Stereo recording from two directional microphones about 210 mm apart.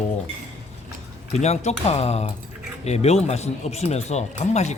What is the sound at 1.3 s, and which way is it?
Speech, 30° left (ahead or behind).